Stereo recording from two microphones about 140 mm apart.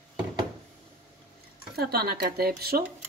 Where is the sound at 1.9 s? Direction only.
90° right.